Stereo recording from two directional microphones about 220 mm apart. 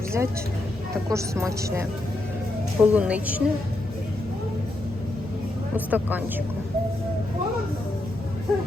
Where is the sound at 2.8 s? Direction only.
5° right (ahead or behind).